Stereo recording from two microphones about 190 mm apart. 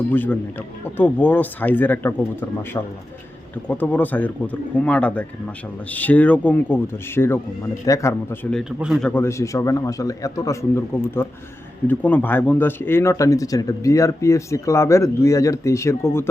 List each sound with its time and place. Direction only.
0.1 s speech: 10° left (ahead or behind)